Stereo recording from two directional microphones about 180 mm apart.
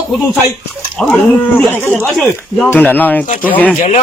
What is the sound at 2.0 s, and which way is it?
Speech, centre (ahead or behind).